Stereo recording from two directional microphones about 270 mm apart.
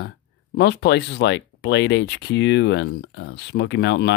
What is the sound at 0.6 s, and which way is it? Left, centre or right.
Speech, left.